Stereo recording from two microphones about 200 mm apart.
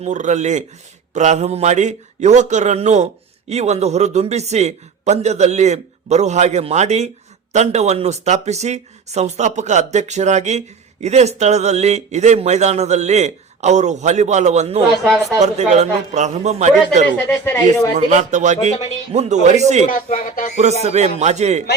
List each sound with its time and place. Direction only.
0.0 s speech: 35° right (ahead or behind)
15.0 s speech: centre (ahead or behind)
15.4 s speech: 35° right (ahead or behind)
17.2 s speech: 10° left (ahead or behind)
17.9 s speech: 35° right (ahead or behind)
19.9 s speech: 45° left (ahead or behind)
20.8 s speech: 35° right (ahead or behind)